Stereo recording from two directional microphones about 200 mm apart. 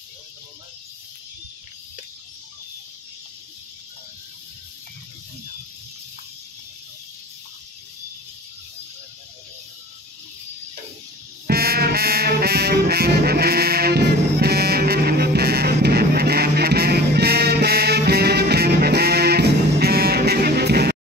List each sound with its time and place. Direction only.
11.4 s brass instrument: 50° right (ahead or behind)